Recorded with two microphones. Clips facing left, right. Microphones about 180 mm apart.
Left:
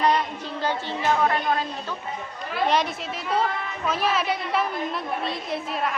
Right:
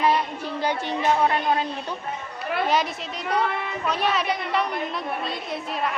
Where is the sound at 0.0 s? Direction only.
10° right (ahead or behind).